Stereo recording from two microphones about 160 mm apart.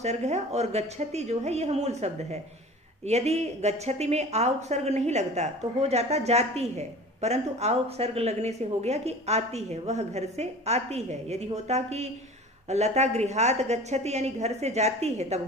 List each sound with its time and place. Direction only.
0.0 s speech: 45° right (ahead or behind)